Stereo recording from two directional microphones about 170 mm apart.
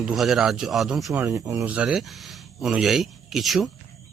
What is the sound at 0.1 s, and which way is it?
Speech, centre (ahead or behind).